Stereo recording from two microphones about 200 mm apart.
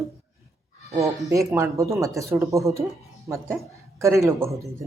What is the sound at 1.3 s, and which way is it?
Speech, 15° right (ahead or behind).